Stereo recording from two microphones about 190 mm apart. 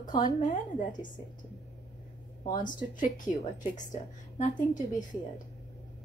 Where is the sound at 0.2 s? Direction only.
45° left (ahead or behind).